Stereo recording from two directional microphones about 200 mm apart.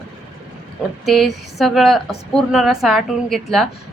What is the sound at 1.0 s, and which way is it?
A woman's voice, centre (ahead or behind).